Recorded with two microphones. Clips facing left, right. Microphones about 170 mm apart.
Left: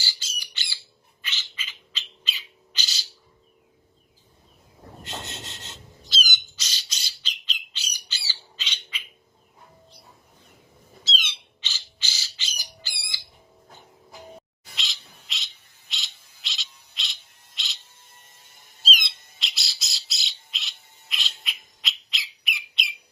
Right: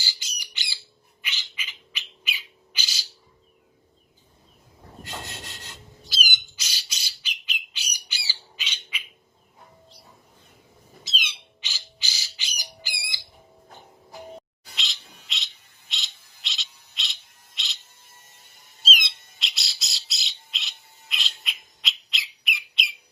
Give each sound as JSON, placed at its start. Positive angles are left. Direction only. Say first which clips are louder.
{"t": 0.0, "sound": "bird", "louder": "left 1 dB", "side_deg": -15}
{"t": 5.0, "sound": "rub", "louder": "left 1 dB", "side_deg": 20}
{"t": 6.1, "sound": "squawk", "louder": "even", "side_deg": -10}
{"t": 11.0, "sound": "squawk", "louder": "left 1 dB", "side_deg": -15}
{"t": 15.3, "sound": "bird", "louder": "right 1 dB", "side_deg": 0}
{"t": 15.9, "sound": "a sound", "louder": "right 1 dB", "side_deg": 0}
{"t": 18.8, "sound": "squawk", "louder": "right 1 dB", "side_deg": 0}